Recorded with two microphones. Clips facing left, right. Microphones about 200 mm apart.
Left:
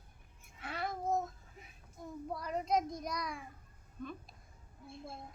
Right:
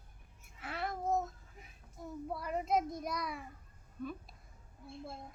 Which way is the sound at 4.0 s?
5° right (ahead or behind).